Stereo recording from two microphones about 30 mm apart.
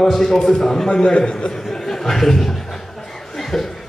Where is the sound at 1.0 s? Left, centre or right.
Left.